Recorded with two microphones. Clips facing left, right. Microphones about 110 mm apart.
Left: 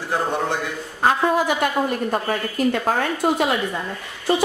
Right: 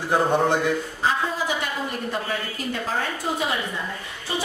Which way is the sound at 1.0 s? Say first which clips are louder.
Left 9 dB; 55° left (ahead or behind).